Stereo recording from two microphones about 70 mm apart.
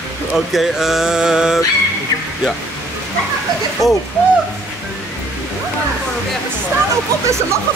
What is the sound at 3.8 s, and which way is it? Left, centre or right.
Speech, left.